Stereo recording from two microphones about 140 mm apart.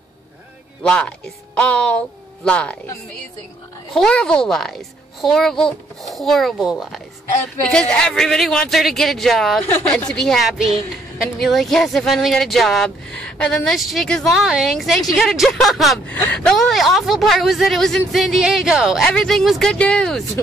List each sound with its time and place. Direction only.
0.8 s speech: 5° left (ahead or behind)
3.9 s speech: 5° left (ahead or behind)
9.6 s speech: 15° left (ahead or behind)
16.1 s speech: 10° left (ahead or behind)